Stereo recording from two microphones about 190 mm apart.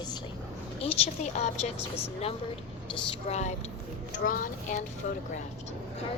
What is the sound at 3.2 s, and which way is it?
Speech, 35° left (ahead or behind).